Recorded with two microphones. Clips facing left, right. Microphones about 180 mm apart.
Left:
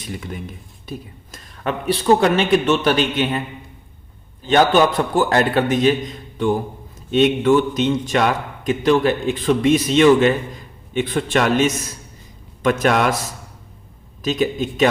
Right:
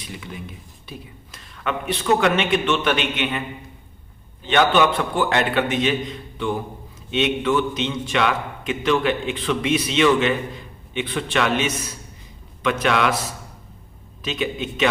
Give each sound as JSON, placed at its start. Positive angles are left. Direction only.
{"t": 0.0, "sound": "speech", "side_deg": 45}
{"t": 4.4, "sound": "a man's voice", "side_deg": 40}